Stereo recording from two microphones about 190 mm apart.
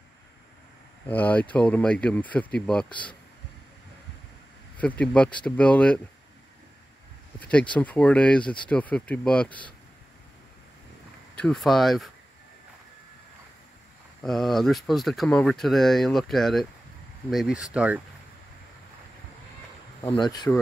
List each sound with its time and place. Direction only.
1.0 s speech: 10° left (ahead or behind)
4.7 s speech: 5° left (ahead or behind)
7.3 s speech: 5° left (ahead or behind)
11.3 s speech: centre (ahead or behind)
14.2 s speech: centre (ahead or behind)
20.0 s speech: 20° left (ahead or behind)